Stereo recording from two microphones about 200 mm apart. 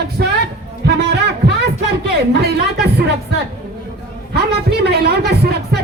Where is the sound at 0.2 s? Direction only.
50° right (ahead or behind).